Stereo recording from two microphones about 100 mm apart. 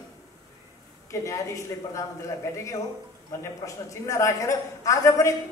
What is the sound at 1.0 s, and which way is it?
A woman's voice, 30° left (ahead or behind).